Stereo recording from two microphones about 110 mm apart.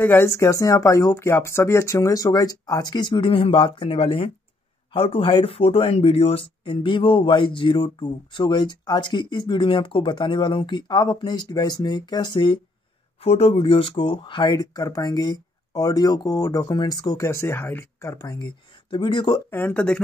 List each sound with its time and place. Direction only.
0.0 s speech: 20° left (ahead or behind); by 12.5 s 45° left (ahead or behind)
13.2 s speech: 65° left (ahead or behind); by 18.5 s 30° left (ahead or behind)
18.9 s speech: 50° left (ahead or behind)
19.5 s speech: 15° left (ahead or behind)